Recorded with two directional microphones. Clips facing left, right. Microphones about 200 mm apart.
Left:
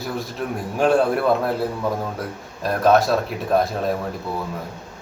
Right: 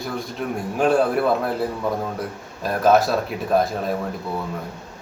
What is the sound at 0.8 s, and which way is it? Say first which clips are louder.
Speech: left 1 dB; centre (ahead or behind).